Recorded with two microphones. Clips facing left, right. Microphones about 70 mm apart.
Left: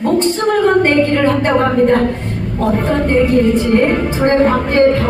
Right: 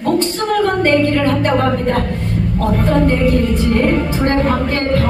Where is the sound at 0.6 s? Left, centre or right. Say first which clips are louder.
Left 3 dB; left.